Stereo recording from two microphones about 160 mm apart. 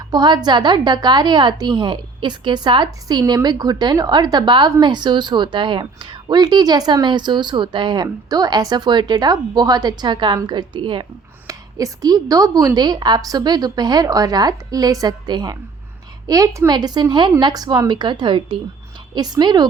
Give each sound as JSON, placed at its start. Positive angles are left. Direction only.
{"t": 0.1, "sound": "a woman's voice", "side_deg": -25}